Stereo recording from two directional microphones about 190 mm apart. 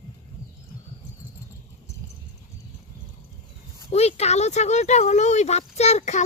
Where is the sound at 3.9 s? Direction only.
35° left (ahead or behind).